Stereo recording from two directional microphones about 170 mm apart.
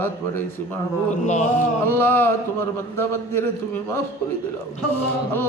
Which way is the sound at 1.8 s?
10° left (ahead or behind).